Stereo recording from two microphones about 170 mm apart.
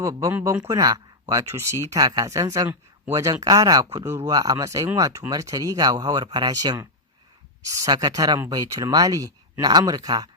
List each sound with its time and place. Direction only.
0.0 s speech: 20° right (ahead or behind)